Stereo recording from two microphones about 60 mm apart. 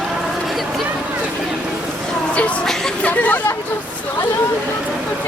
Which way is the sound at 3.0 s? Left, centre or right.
Left.